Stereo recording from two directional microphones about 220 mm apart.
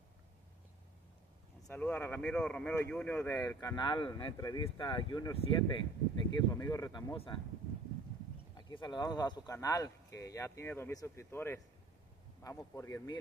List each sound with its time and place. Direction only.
1.7 s speech: 10° left (ahead or behind)
8.5 s speech: 20° left (ahead or behind)